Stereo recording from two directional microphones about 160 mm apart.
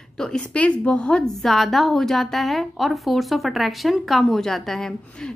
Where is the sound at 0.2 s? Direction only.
5° left (ahead or behind).